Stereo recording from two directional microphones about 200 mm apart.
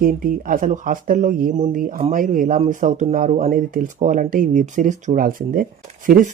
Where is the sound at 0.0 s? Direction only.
45° right (ahead or behind).